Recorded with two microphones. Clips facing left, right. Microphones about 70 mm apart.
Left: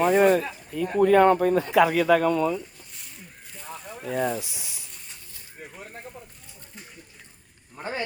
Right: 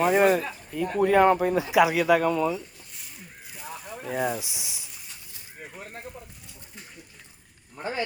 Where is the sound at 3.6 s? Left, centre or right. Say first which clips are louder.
Even; centre.